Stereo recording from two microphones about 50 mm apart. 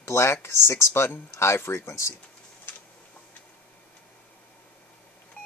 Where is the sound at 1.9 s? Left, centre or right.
Left.